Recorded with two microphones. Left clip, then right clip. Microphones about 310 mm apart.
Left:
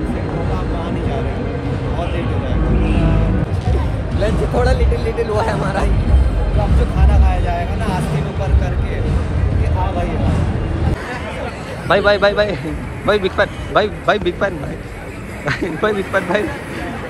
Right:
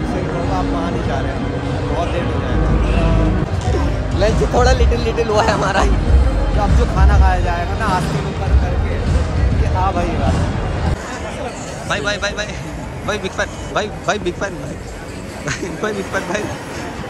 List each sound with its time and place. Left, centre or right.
4.2 s vehicle: centre
11.9 s a man's voice: centre